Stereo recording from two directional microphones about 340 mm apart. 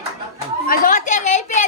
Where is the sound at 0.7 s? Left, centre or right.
Left.